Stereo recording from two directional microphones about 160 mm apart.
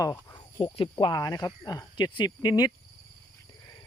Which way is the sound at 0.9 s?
25° left (ahead or behind).